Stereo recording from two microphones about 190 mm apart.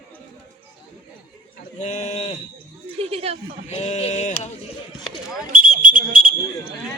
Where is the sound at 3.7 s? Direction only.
35° left (ahead or behind).